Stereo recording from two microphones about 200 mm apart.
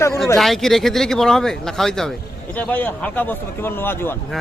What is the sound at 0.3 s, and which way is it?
A man's voice, centre (ahead or behind).